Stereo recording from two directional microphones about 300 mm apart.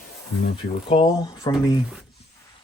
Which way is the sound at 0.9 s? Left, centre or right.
Centre.